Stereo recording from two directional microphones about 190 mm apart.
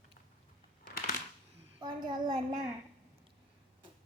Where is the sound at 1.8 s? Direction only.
20° right (ahead or behind).